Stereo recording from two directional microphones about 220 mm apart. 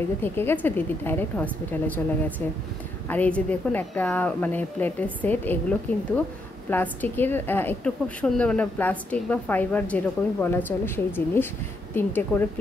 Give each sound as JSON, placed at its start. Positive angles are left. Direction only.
{"t": 0.2, "sound": "a woman's voice", "side_deg": 10}